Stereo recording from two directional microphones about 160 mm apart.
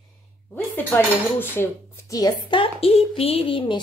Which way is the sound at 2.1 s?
20° left (ahead or behind).